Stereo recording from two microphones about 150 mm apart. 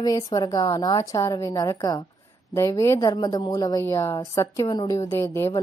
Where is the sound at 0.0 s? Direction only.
25° left (ahead or behind).